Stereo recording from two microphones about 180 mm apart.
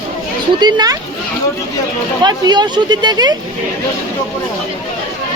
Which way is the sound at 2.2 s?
25° right (ahead or behind).